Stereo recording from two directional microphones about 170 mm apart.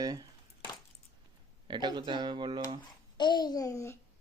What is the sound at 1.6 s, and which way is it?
Speech, 25° right (ahead or behind).